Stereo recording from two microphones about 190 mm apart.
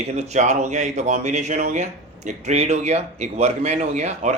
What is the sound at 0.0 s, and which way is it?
Speech, 35° right (ahead or behind).